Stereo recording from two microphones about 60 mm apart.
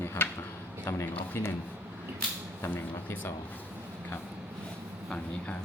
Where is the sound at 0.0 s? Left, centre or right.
Left.